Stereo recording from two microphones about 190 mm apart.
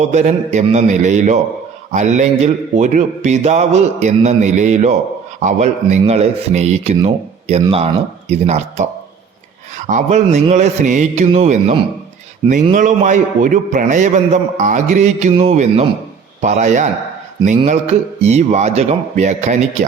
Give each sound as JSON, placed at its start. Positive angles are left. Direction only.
{"t": 0.1, "sound": "a man's voice", "side_deg": -40}
{"t": 18.2, "sound": "a man's voice", "side_deg": -35}